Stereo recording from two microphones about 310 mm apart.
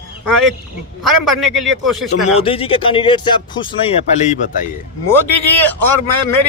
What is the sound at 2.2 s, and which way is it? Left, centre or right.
Speech, centre.